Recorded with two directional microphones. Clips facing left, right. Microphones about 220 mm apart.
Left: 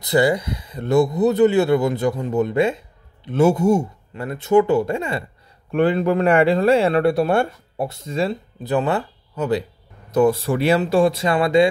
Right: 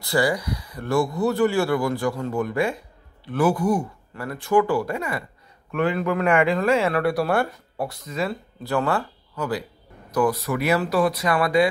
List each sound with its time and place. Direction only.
0.0 s speech: 20° left (ahead or behind)